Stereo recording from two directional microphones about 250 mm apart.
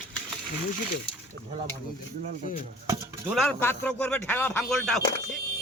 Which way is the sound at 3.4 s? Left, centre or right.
Centre.